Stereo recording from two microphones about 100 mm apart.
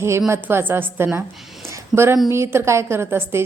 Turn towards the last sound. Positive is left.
turn(degrees=-25)  # may be behind; listen again after turning